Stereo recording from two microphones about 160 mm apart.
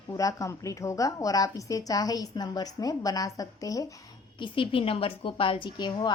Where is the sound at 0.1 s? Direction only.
20° left (ahead or behind).